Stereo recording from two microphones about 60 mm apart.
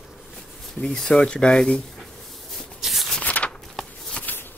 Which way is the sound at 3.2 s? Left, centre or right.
Left.